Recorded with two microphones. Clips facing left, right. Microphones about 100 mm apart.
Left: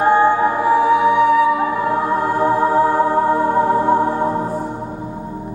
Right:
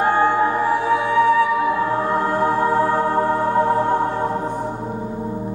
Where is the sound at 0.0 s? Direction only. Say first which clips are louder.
Left 3 dB; 15° left (ahead or behind).